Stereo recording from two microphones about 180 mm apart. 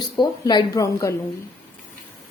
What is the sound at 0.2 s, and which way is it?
Speech, 25° left (ahead or behind).